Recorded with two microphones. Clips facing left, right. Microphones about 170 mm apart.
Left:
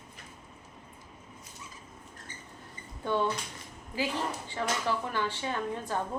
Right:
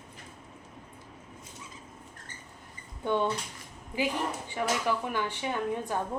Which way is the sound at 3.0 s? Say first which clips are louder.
Right 1 dB; 20° right (ahead or behind).